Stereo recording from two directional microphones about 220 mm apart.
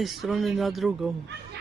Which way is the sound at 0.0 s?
Centre (ahead or behind).